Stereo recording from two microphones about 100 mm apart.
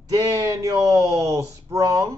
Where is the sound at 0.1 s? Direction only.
40° right (ahead or behind).